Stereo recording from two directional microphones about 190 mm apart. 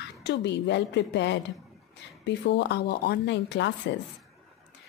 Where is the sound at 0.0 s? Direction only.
65° left (ahead or behind).